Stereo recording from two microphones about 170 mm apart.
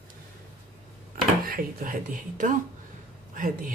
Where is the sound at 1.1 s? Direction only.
55° right (ahead or behind).